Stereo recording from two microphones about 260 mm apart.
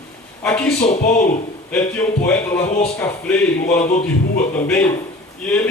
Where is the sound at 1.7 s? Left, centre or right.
Centre.